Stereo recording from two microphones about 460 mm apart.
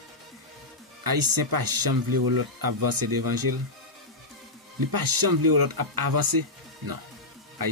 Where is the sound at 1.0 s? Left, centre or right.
Right.